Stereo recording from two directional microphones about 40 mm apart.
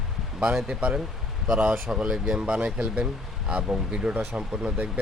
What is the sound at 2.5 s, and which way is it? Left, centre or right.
Speech, right.